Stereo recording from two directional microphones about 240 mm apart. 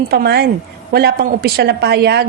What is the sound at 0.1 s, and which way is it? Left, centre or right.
A woman's voice, right.